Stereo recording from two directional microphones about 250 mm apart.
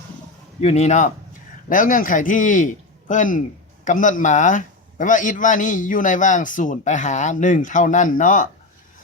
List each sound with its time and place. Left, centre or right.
0.6 s a man's voice: left